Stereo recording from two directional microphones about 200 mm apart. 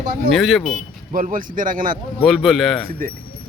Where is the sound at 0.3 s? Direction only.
Centre (ahead or behind).